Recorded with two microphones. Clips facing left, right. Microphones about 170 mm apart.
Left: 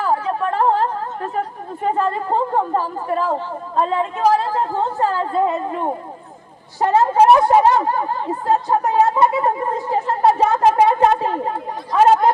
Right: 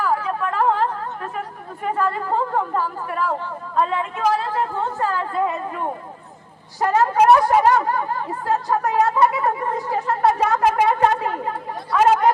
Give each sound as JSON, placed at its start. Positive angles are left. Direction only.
{"t": 0.0, "sound": "chatter", "side_deg": 30}
{"t": 1.8, "sound": "a woman's voice", "side_deg": 30}